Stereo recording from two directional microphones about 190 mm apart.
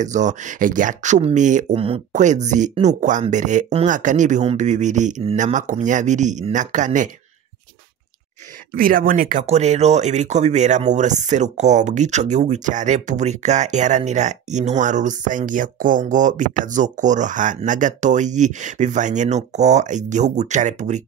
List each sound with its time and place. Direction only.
0.0 s speech: 40° right (ahead or behind)
8.7 s speech: 50° right (ahead or behind)